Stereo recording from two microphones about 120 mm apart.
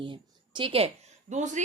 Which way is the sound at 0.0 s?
45° right (ahead or behind).